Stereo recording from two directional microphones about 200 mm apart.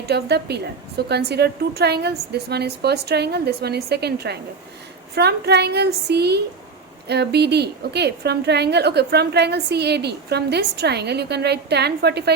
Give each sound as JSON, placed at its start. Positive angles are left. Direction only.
{"t": 0.1, "sound": "a woman's voice", "side_deg": -55}